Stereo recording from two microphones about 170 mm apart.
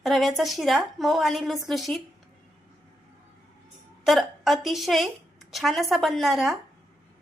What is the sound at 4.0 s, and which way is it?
Speech, centre (ahead or behind).